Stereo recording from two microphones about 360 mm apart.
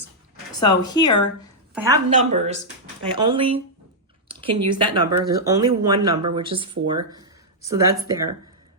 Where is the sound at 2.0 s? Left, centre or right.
Centre.